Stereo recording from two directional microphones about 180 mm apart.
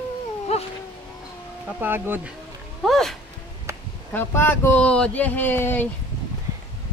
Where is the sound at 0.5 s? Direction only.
35° left (ahead or behind).